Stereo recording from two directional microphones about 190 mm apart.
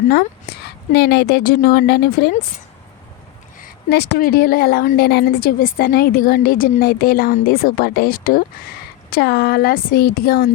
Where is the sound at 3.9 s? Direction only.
60° left (ahead or behind).